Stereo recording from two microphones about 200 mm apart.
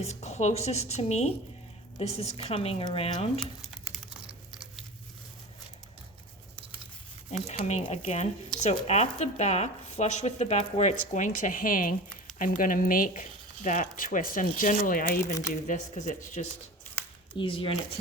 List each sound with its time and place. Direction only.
0.0 s speech: 35° left (ahead or behind)
3.4 s patter: centre (ahead or behind)
7.4 s speech: 35° left (ahead or behind)
17.3 s speech: 25° left (ahead or behind)